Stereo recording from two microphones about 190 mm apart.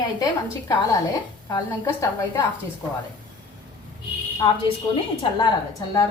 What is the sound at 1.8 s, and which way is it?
Speech, 15° left (ahead or behind).